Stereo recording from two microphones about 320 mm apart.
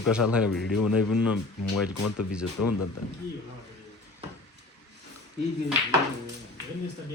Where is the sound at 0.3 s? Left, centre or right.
Centre.